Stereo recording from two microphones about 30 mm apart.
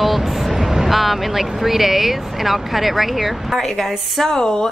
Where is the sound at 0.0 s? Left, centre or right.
Centre.